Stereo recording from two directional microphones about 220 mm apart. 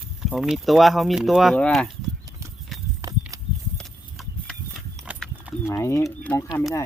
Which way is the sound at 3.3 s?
15° right (ahead or behind).